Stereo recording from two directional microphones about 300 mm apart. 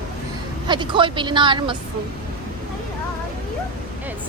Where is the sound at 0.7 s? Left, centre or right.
Centre.